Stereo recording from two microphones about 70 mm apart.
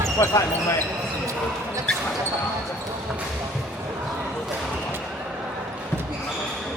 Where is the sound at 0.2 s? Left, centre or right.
Left.